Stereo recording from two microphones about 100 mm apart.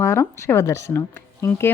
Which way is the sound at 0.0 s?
25° left (ahead or behind).